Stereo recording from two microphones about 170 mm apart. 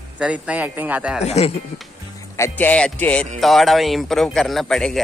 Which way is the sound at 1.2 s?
40° left (ahead or behind).